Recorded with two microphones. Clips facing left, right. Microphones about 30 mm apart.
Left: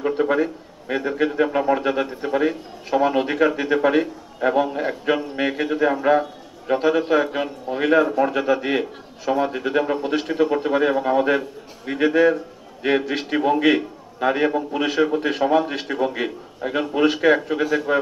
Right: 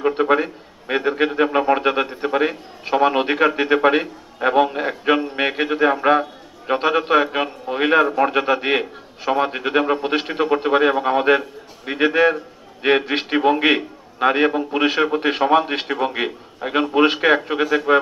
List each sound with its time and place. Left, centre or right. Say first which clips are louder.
0.0 s a man's voice: right 2 dB; right